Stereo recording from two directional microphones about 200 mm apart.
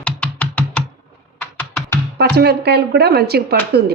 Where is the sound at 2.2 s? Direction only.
55° right (ahead or behind).